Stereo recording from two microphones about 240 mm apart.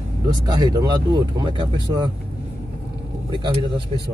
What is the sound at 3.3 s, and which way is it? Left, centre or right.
Speech, right.